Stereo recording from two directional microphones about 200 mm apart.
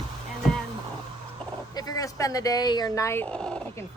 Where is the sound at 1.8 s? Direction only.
15° left (ahead or behind).